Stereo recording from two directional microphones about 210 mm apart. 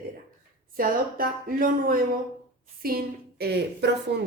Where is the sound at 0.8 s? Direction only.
40° right (ahead or behind).